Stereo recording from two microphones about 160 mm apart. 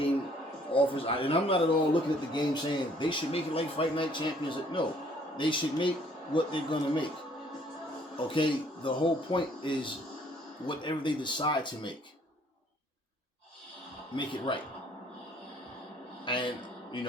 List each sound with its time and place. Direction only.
0.7 s speech: 35° left (ahead or behind)
8.3 s speech: 30° left (ahead or behind)
14.2 s speech: 30° left (ahead or behind)
16.2 s a man's voice: 30° left (ahead or behind)